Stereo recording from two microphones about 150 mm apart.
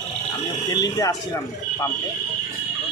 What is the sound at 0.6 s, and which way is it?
Speech, 25° left (ahead or behind).